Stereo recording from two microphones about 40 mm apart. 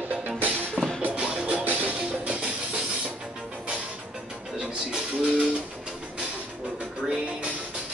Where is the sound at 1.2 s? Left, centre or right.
Right.